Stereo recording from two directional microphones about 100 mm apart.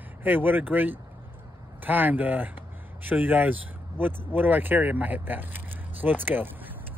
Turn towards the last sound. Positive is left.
turn(degrees=-20)  # may be behind; listen again after turning